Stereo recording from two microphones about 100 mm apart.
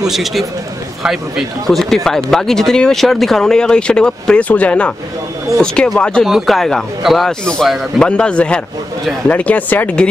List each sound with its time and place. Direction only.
0.0 s speech: centre (ahead or behind)
6.2 s speech: centre (ahead or behind); by 10.0 s 15° left (ahead or behind)